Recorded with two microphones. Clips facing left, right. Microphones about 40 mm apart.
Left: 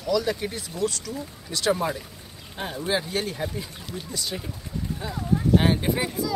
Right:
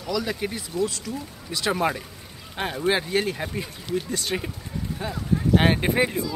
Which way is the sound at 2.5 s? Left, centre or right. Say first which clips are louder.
Right 3 dB; right.